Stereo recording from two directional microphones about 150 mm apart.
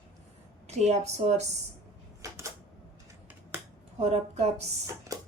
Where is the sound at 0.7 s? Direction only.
50° right (ahead or behind).